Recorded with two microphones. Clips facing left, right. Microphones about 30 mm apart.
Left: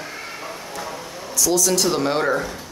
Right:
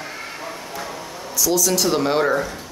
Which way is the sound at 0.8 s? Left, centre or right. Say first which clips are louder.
Even; centre.